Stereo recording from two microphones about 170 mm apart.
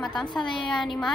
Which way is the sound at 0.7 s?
Centre (ahead or behind).